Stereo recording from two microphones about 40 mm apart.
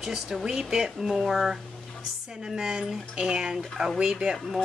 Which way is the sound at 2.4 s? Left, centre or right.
Centre.